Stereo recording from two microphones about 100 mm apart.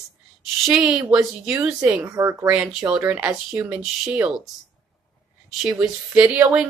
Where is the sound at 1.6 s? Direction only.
10° right (ahead or behind).